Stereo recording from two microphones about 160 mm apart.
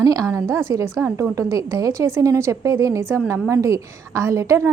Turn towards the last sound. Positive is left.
turn(degrees=-20)  # may be behind; listen again after turning